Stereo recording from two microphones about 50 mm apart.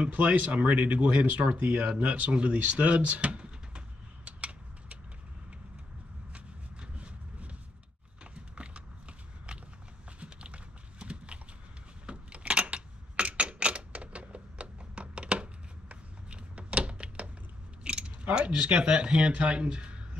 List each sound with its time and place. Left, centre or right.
0.1 s speech: right
2.9 s a sound: right
6.3 s vehicle: right
10.2 s clip-clop: right
12.1 s typewriter: right
17.8 s a sound: right